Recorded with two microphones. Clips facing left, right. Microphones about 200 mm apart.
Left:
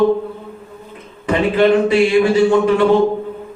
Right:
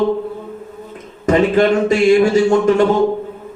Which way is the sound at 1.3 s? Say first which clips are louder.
Right 1 dB; 45° right (ahead or behind).